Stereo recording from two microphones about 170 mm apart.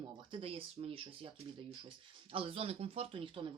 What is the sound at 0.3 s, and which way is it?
Speech, 35° right (ahead or behind).